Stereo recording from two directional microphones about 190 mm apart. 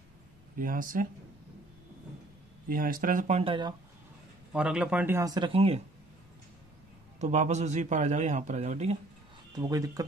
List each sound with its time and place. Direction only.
0.6 s speech: 45° right (ahead or behind)
2.7 s speech: 50° right (ahead or behind); by 3.7 s 25° right (ahead or behind)
4.5 s speech: 5° right (ahead or behind); by 5.8 s 30° right (ahead or behind)
7.2 s a man's voice: 35° right (ahead or behind)
9.5 s speech: 20° right (ahead or behind)